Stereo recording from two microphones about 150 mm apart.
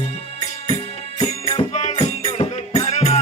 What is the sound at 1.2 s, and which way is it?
Music, 45° left (ahead or behind).